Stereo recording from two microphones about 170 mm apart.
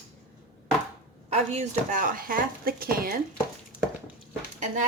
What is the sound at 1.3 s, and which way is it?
Speech, 40° right (ahead or behind).